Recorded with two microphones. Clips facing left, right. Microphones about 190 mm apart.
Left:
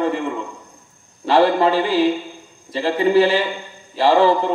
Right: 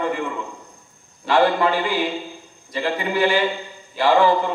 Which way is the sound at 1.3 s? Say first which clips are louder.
Left 3 dB; 35° left (ahead or behind).